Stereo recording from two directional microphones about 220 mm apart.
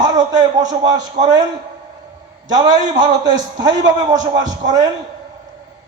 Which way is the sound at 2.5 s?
15° right (ahead or behind).